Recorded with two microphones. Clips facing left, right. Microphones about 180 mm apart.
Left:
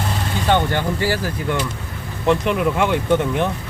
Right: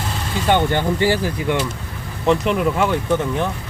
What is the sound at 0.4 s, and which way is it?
Speech, 15° right (ahead or behind).